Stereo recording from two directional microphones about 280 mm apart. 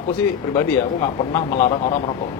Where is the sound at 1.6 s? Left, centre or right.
Left.